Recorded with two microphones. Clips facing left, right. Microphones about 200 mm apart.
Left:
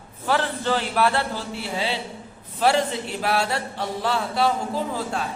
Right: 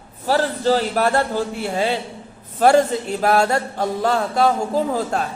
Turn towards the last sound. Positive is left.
turn(degrees=-45)  # may be behind; listen again after turning